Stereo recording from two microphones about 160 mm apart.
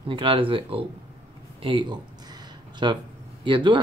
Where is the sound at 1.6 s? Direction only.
30° right (ahead or behind).